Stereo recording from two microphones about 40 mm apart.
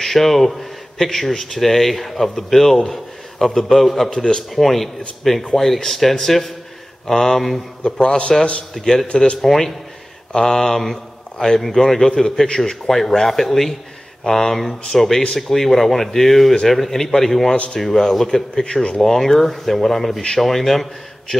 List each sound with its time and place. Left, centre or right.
0.0 s a man's voice: centre
4.1 s speech: centre
4.6 s speech: centre
7.8 s a man's voice: centre
8.7 s speech: centre
9.0 s a man's voice: left
9.4 s a man's voice: centre